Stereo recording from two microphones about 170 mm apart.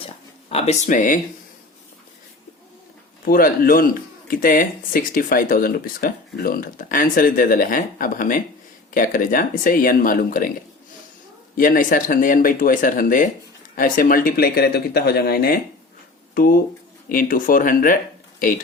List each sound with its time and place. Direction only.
0.5 s speech: 40° left (ahead or behind)
3.2 s speech: 60° left (ahead or behind)
11.5 s speech: 55° left (ahead or behind)